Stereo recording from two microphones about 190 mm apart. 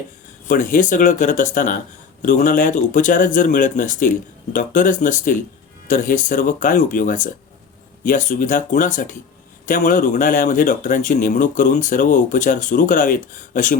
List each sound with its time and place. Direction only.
0.4 s speech: 45° left (ahead or behind)